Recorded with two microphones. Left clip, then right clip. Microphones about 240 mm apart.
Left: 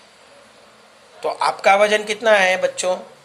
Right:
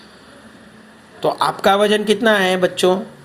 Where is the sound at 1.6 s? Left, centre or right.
Right.